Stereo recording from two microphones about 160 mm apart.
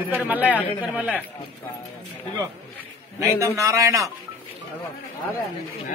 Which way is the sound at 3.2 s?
20° right (ahead or behind).